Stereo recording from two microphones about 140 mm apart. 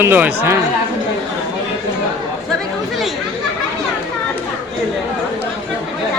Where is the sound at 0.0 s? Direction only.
15° right (ahead or behind).